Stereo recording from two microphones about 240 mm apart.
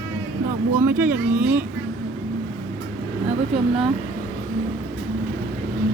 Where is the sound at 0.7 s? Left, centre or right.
Centre.